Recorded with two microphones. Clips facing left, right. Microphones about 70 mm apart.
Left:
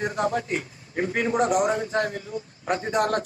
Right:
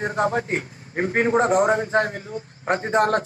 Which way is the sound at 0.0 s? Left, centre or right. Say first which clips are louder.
Right 3 dB; right.